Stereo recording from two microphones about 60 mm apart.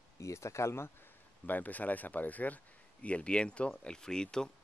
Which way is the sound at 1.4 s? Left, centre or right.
Left.